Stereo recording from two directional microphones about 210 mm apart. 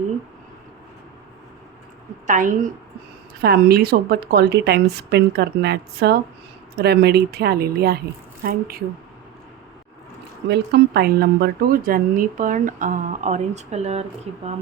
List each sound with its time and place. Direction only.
2.2 s speech: 40° right (ahead or behind)
3.4 s a woman's voice: 50° right (ahead or behind)
10.5 s speech: 50° right (ahead or behind); by 14.0 s 30° right (ahead or behind)